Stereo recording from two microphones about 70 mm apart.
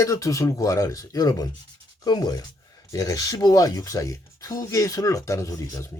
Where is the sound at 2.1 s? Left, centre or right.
Left.